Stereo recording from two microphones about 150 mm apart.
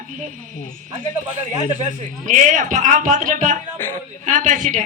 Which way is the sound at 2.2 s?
60° right (ahead or behind).